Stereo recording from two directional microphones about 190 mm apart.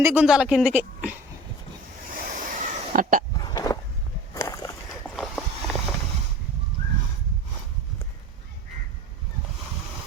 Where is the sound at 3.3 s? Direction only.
20° left (ahead or behind).